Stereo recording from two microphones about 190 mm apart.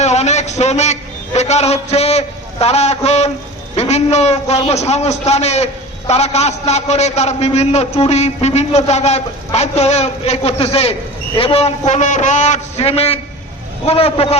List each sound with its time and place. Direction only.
0.0 s a man's voice: 35° left (ahead or behind)